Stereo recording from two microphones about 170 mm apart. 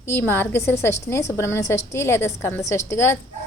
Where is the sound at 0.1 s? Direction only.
15° left (ahead or behind).